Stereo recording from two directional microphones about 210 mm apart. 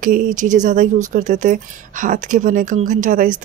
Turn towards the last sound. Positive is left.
turn(degrees=-40)  # may be behind; listen again after turning